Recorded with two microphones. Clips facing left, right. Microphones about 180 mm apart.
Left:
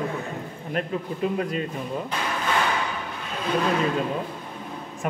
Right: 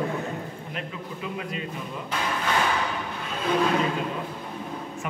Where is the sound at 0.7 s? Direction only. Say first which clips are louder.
Left 11 dB; 45° left (ahead or behind).